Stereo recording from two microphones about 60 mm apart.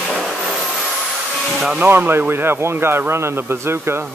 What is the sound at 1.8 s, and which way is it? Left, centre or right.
Speech, right.